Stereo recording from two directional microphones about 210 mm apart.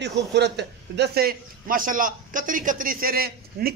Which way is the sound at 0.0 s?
55° right (ahead or behind).